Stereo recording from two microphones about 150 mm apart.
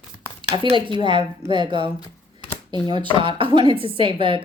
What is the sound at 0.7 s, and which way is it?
A woman's voice, 35° right (ahead or behind).